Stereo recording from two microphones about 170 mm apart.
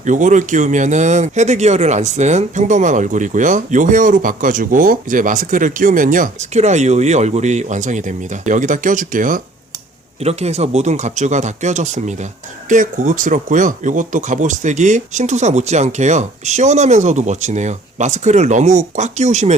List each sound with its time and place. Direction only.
0.0 s speech: 45° right (ahead or behind)
10.2 s speech: 40° right (ahead or behind)